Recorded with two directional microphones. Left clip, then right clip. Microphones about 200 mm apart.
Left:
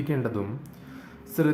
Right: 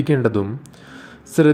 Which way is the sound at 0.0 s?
30° right (ahead or behind).